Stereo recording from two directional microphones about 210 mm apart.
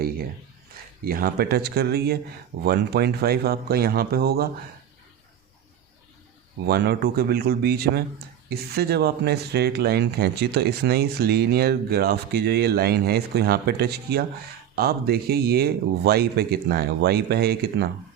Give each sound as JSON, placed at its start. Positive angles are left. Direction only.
{"t": 1.0, "sound": "speech", "side_deg": -45}
{"t": 6.7, "sound": "speech", "side_deg": -50}